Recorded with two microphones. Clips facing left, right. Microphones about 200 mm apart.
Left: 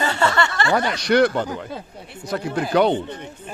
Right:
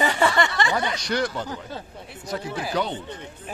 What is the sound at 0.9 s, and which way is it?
Speech, 65° left (ahead or behind).